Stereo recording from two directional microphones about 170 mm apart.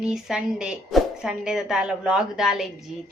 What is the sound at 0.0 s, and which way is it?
A woman's voice, 5° right (ahead or behind).